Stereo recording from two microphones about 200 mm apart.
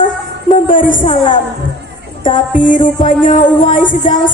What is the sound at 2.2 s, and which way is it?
Music, 40° left (ahead or behind).